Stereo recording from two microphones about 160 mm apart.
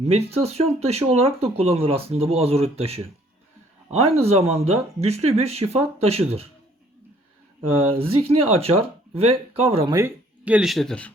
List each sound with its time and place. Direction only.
0.0 s speech: 40° right (ahead or behind)
7.8 s speech: 35° right (ahead or behind)
10.4 s speech: 5° right (ahead or behind)